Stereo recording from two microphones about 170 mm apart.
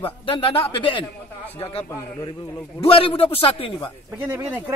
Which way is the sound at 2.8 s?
35° left (ahead or behind).